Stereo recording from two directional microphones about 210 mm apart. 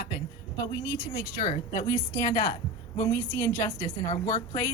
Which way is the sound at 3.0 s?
15° left (ahead or behind).